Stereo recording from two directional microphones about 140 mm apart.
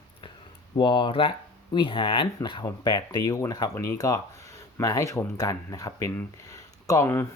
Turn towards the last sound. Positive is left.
turn(degrees=20)  # may be behind; listen again after turning